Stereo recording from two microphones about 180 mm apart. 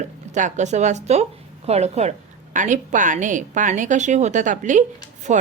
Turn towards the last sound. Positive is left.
turn(degrees=-40)  # may be behind; listen again after turning